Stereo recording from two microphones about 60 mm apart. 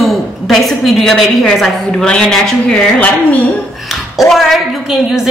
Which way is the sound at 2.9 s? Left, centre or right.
Left.